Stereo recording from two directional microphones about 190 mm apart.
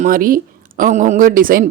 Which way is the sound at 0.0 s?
45° right (ahead or behind).